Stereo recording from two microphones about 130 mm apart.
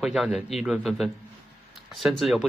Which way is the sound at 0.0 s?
5° right (ahead or behind).